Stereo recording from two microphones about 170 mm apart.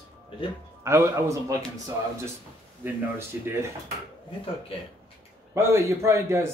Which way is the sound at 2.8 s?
15° right (ahead or behind).